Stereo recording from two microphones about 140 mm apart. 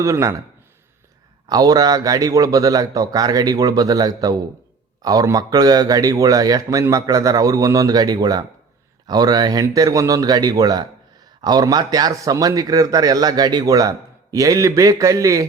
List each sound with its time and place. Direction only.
0.0 s speech: 20° right (ahead or behind)
1.5 s speech: 25° right (ahead or behind)